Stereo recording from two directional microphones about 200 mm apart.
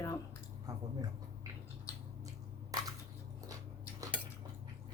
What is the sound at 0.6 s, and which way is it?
Speech, 15° right (ahead or behind).